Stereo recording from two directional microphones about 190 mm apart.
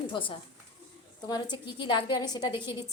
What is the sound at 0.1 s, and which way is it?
A woman's voice, 25° left (ahead or behind).